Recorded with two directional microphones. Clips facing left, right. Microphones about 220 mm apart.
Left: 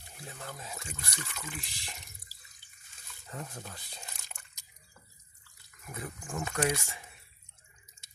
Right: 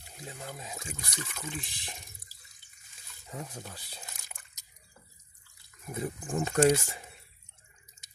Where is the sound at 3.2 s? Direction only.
10° right (ahead or behind).